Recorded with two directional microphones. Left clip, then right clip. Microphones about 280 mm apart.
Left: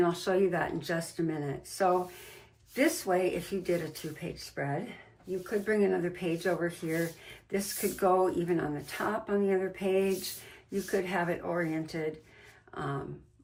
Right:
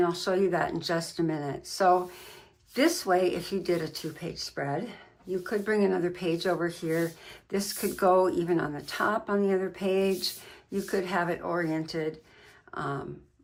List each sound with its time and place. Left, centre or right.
0.0 s speech: centre